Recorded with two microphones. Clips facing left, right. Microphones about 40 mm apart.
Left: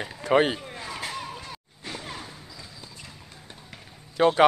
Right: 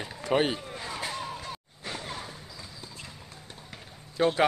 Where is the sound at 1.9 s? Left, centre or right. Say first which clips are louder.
Left 1 dB; centre.